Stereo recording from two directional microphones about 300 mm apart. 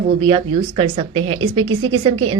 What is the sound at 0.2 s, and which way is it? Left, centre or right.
A woman's voice, centre.